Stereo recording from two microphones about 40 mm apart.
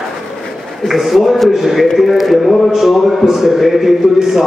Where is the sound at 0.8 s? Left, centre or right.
Centre.